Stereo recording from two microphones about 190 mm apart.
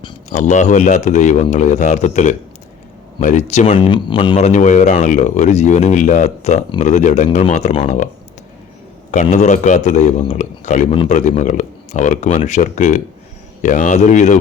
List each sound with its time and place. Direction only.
0.3 s speech: 40° left (ahead or behind)
3.8 s speech: 25° left (ahead or behind)
4.4 s speech: 40° left (ahead or behind)
9.2 s speech: 40° left (ahead or behind)